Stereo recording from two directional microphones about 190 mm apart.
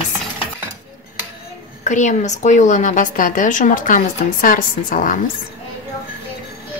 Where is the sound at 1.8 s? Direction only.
40° left (ahead or behind).